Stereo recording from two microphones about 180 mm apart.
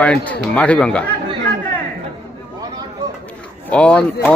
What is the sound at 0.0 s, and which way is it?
Speech, 5° left (ahead or behind).